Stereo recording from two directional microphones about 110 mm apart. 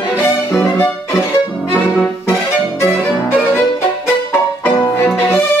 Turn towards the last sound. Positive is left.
turn(degrees=20)  # may be behind; listen again after turning